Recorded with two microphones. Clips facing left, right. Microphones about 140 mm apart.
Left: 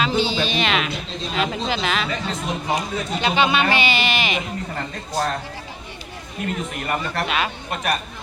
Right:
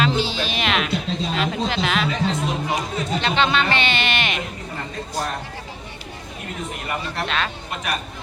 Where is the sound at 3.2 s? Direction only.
5° left (ahead or behind).